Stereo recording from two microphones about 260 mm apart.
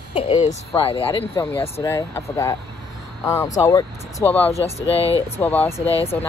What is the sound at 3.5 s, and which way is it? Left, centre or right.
Speech, centre.